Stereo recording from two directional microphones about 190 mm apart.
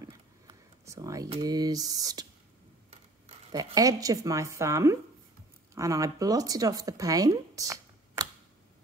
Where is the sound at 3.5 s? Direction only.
20° right (ahead or behind).